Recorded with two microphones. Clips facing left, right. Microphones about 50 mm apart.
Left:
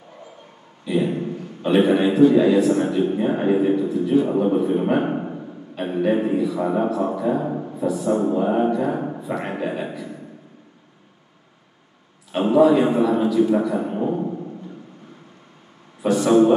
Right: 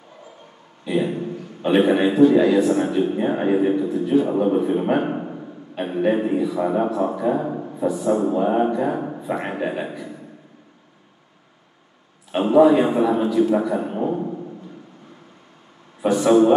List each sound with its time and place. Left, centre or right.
1.6 s a man's voice: centre
2.0 s a man's voice: centre
5.2 s a sound: centre
5.8 s a man's voice: centre
7.4 s speech: centre
7.7 s a man's voice: centre
8.9 s a sound: centre
9.2 s a man's voice: centre
12.3 s a man's voice: centre
16.0 s a man's voice: right